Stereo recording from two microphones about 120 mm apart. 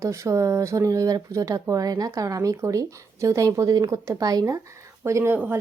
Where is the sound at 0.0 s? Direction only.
25° right (ahead or behind).